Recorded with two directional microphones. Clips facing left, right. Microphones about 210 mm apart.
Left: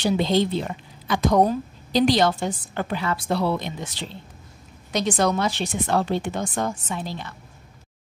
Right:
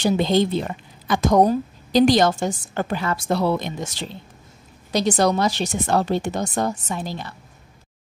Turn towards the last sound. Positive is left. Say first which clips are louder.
# right 2 dB
turn(degrees=-40)  # may be behind; listen again after turning